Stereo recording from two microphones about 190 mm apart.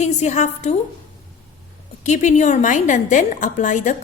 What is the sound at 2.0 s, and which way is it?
A woman's voice, 40° left (ahead or behind).